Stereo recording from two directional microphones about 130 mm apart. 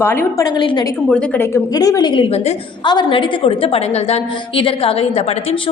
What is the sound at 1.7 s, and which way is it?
A woman's voice, 30° left (ahead or behind).